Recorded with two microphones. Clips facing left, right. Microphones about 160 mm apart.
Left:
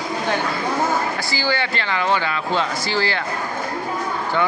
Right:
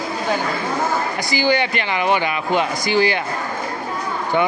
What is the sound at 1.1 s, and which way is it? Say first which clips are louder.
Speech: right 4 dB; 15° right (ahead or behind).